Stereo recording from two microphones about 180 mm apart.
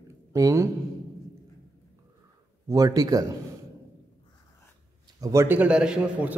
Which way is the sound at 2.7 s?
20° right (ahead or behind).